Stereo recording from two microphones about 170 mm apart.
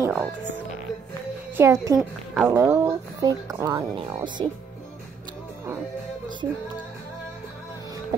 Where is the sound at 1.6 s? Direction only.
20° right (ahead or behind).